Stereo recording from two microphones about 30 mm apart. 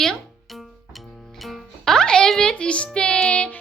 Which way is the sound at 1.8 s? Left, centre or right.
Centre.